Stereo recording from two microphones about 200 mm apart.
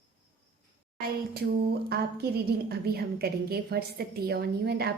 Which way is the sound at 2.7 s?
50° right (ahead or behind).